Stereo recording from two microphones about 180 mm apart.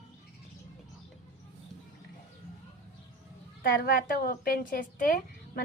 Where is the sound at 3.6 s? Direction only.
55° left (ahead or behind).